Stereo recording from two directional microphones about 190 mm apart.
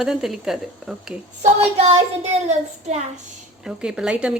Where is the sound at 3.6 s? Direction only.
5° right (ahead or behind).